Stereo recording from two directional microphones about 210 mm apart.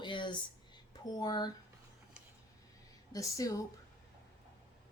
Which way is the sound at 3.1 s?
15° left (ahead or behind).